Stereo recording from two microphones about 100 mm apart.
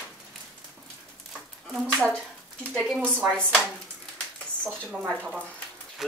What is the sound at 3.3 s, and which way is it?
Chopping, 10° left (ahead or behind).